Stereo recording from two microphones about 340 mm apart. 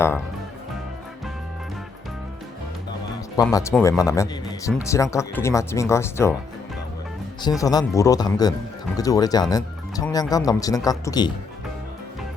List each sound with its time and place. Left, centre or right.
3.4 s speech: centre
7.4 s speech: centre